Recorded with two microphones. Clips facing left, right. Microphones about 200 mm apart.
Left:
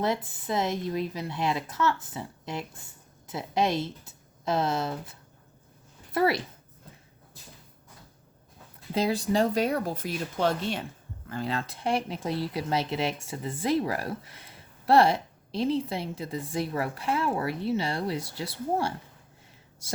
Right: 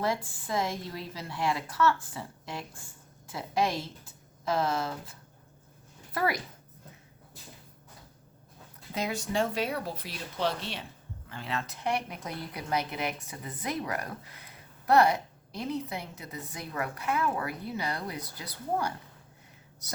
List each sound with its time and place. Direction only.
0.0 s a woman's voice: 20° left (ahead or behind)
6.1 s speech: 25° left (ahead or behind)
8.9 s speech: 30° left (ahead or behind)